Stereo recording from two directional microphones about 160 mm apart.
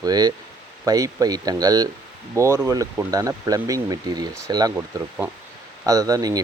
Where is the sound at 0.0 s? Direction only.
25° right (ahead or behind).